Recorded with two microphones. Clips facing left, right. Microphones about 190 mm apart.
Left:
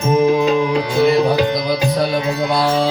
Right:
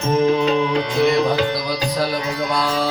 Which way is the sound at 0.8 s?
30° left (ahead or behind).